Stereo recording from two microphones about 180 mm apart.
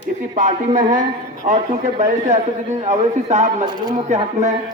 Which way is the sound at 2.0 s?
40° right (ahead or behind).